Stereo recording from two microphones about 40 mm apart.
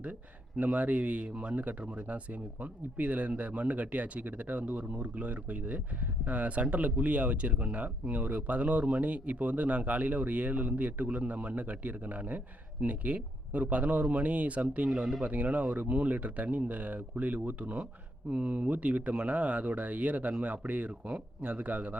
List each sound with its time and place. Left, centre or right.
0.5 s speech: right
14.8 s speech: right